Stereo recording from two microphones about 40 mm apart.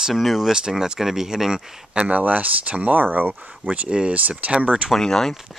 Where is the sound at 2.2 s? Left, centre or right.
Right.